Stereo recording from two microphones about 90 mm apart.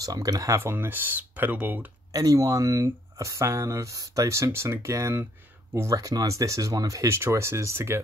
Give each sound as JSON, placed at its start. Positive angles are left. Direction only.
{"t": 0.0, "sound": "speech", "side_deg": -45}
{"t": 0.6, "sound": "speech", "side_deg": -25}
{"t": 2.1, "sound": "speech", "side_deg": -40}
{"t": 5.9, "sound": "speech", "side_deg": -40}